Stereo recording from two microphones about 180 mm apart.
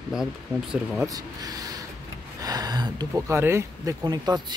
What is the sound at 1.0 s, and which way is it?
Speech, 20° right (ahead or behind).